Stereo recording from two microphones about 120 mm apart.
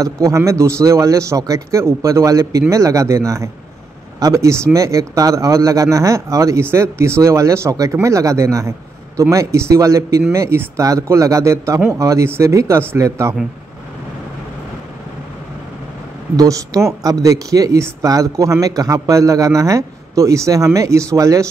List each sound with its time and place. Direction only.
0.0 s speech: 25° right (ahead or behind)
16.3 s speech: 30° right (ahead or behind)